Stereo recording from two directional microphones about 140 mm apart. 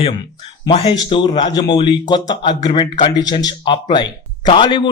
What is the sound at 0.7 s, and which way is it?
Speech, 40° left (ahead or behind).